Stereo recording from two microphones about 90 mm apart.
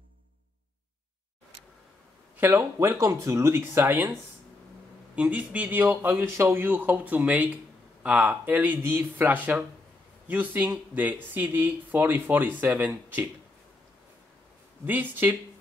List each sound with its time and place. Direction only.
2.5 s speech: 35° right (ahead or behind)
5.1 s speech: 15° right (ahead or behind)
14.9 s speech: 20° right (ahead or behind)